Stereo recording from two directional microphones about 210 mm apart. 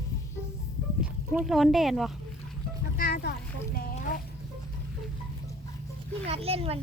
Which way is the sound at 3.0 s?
45° left (ahead or behind).